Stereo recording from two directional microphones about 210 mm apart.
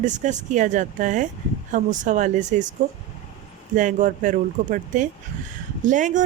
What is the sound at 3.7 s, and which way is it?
Speech, 35° right (ahead or behind).